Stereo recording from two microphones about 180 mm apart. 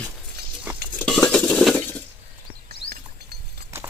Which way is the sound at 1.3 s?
5° left (ahead or behind).